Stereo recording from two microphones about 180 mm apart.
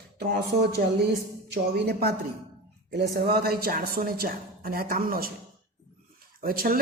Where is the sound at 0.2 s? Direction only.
60° right (ahead or behind).